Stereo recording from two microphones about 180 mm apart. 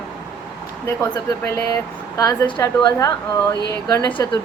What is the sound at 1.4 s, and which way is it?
A woman's voice, 15° left (ahead or behind).